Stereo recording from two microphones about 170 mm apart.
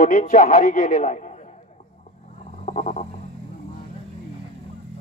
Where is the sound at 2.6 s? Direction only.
45° left (ahead or behind).